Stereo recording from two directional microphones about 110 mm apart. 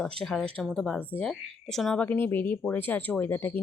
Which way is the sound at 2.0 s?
15° left (ahead or behind).